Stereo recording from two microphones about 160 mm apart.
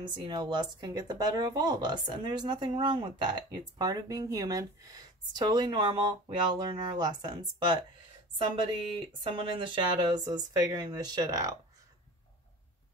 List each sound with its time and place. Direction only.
0.1 s speech: 30° right (ahead or behind)